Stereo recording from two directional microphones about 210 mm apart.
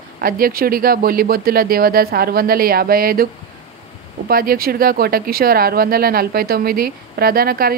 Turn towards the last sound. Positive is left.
turn(degrees=-45)  # may be behind; listen again after turning